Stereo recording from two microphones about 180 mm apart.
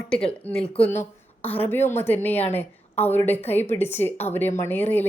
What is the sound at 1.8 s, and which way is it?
Speech, 40° left (ahead or behind).